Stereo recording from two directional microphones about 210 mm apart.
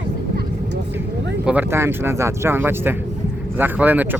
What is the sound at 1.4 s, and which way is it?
Speech, 10° right (ahead or behind).